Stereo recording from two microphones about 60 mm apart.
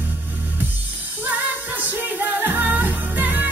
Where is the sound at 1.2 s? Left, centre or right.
Right.